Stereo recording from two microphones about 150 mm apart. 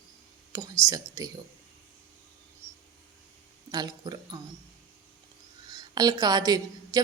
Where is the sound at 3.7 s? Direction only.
25° right (ahead or behind).